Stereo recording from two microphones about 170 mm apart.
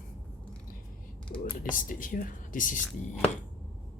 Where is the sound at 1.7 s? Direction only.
50° left (ahead or behind).